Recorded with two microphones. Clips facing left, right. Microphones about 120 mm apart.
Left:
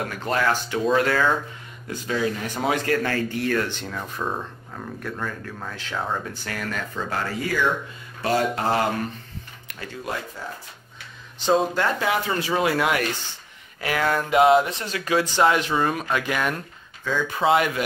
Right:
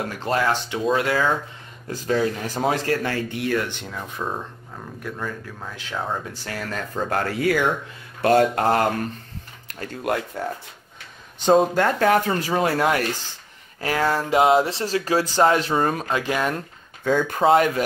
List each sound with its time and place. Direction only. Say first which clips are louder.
0.2 s speech: right 1 dB; 25° right (ahead or behind)
1.9 s speech: right 3 dB; 40° right (ahead or behind)
3.0 s speech: left 1 dB; 20° right (ahead or behind)
6.3 s speech: even; 25° right (ahead or behind)
7.1 s speech: right 6 dB; 55° right (ahead or behind)
10.0 s speech: right 7 dB; 60° right (ahead or behind)
11.4 s speech: right 4 dB; 50° right (ahead or behind); by 16.6 s 30° right (ahead or behind)
17.0 s speech: right 4 dB; 50° right (ahead or behind)